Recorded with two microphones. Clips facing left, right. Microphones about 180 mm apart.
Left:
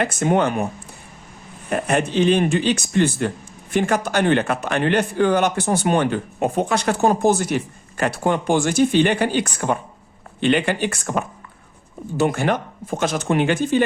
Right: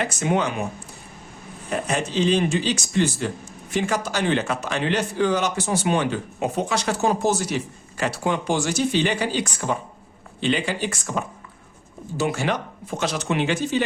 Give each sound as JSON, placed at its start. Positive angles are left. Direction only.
{"t": 0.0, "sound": "a man's voice", "side_deg": 55}
{"t": 1.7, "sound": "a man's voice", "side_deg": 60}